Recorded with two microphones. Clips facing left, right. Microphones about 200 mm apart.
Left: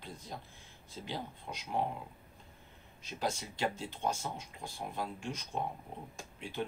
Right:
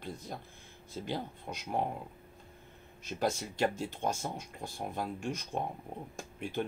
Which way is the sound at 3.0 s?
45° right (ahead or behind).